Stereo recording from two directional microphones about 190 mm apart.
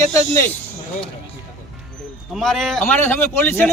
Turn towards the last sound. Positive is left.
turn(degrees=10)  # may be behind; listen again after turning